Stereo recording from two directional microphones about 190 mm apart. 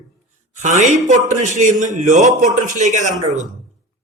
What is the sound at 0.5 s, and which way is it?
A man's voice, 40° right (ahead or behind).